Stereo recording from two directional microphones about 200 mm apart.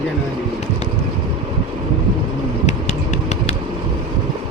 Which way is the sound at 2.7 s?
35° left (ahead or behind).